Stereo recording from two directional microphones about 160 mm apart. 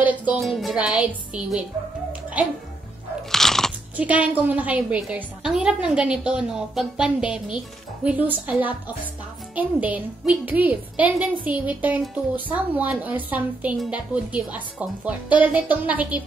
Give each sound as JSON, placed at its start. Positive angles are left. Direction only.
{"t": 0.0, "sound": "a woman's voice", "side_deg": -10}
{"t": 3.3, "sound": "crunch", "side_deg": 0}
{"t": 3.9, "sound": "a woman's voice", "side_deg": -10}